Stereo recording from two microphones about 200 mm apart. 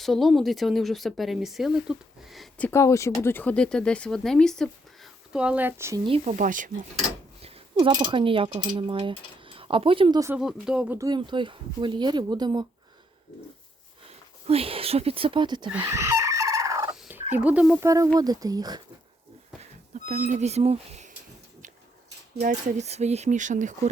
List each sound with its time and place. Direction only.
0.0 s speech: centre (ahead or behind)
6.1 s speech: 30° right (ahead or behind)
7.4 s speech: 25° right (ahead or behind)
10.3 s speech: 5° right (ahead or behind); by 12.6 s 20° right (ahead or behind)
14.4 s speech: 30° right (ahead or behind)
15.8 s fowl: 15° right (ahead or behind)
16.9 s turkey: 5° right (ahead or behind)
17.3 s speech: 5° right (ahead or behind)
17.8 s speech: 15° right (ahead or behind)
20.1 s speech: 40° right (ahead or behind)
22.4 s speech: 35° right (ahead or behind)